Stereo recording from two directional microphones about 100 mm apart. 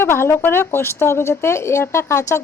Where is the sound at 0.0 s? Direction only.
25° left (ahead or behind).